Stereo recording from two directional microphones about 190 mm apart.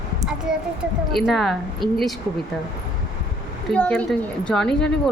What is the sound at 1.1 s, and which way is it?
Speech, centre (ahead or behind).